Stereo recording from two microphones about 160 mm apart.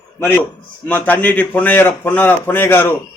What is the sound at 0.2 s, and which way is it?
A man's voice, 10° left (ahead or behind).